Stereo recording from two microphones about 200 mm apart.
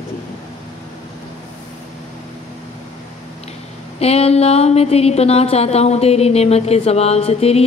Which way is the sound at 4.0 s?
30° left (ahead or behind).